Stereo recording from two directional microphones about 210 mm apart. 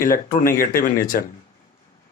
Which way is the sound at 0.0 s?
40° left (ahead or behind).